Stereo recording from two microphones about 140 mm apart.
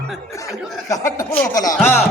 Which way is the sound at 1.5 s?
25° left (ahead or behind).